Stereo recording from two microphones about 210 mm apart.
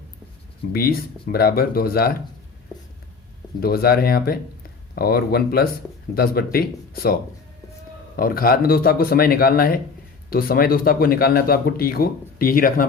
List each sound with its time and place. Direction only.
0.7 s a man's voice: 45° left (ahead or behind)
3.6 s a man's voice: 45° left (ahead or behind)